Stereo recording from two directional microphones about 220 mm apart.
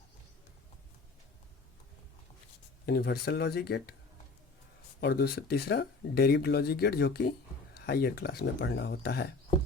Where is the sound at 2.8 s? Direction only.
45° left (ahead or behind).